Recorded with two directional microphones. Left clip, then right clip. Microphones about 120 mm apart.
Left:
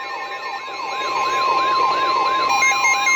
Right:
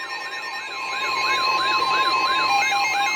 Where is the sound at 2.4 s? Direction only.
40° right (ahead or behind).